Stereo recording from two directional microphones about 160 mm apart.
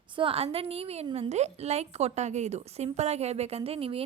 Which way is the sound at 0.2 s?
35° right (ahead or behind).